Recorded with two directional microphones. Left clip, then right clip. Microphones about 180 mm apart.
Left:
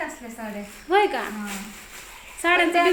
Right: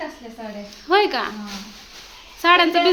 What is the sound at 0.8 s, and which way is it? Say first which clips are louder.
Speech: right 3 dB; 20° right (ahead or behind).